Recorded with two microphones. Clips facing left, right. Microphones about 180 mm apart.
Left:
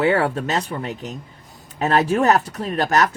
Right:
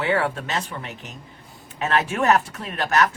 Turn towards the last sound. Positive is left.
turn(degrees=40)  # may be behind; listen again after turning